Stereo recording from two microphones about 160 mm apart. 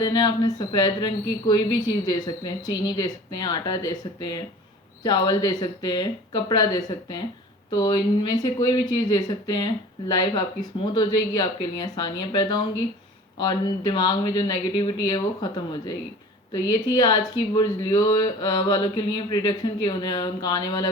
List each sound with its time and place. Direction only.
0.0 s speech: 30° left (ahead or behind)